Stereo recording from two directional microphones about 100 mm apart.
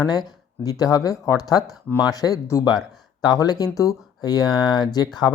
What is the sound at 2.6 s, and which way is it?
Speech, 45° left (ahead or behind).